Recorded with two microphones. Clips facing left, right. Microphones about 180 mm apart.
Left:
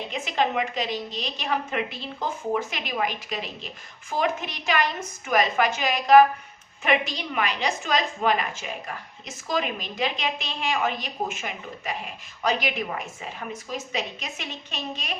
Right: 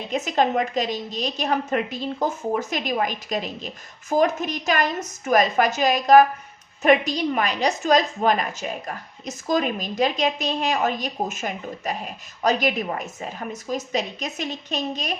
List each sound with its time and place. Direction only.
0.1 s a woman's voice: 45° right (ahead or behind)